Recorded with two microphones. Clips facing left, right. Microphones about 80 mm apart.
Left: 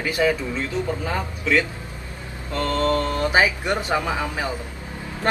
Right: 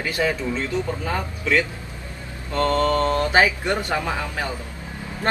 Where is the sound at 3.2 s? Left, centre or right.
Centre.